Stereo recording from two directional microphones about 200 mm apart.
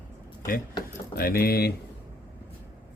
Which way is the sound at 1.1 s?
50° left (ahead or behind).